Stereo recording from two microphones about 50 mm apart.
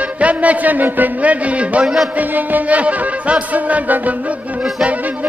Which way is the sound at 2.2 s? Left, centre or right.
Right.